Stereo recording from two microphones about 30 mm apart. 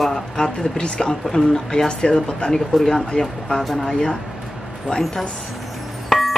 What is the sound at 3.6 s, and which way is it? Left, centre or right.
Speech, centre.